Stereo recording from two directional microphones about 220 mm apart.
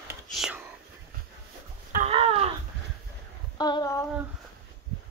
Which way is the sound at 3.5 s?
20° left (ahead or behind).